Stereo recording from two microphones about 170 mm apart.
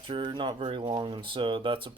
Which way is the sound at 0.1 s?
30° right (ahead or behind).